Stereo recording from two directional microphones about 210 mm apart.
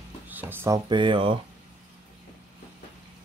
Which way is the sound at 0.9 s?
20° right (ahead or behind).